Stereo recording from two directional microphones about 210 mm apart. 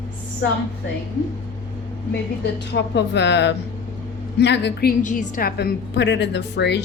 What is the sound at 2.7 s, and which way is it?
A woman's voice, 55° left (ahead or behind).